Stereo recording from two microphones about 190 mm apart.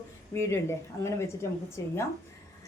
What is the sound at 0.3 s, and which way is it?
A woman's voice, 15° left (ahead or behind).